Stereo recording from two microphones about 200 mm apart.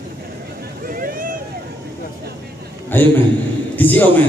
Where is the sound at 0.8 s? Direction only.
45° right (ahead or behind).